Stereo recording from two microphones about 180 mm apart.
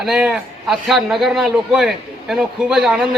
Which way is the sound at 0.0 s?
5° right (ahead or behind).